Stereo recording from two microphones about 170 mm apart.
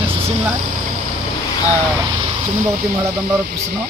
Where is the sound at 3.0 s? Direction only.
15° right (ahead or behind).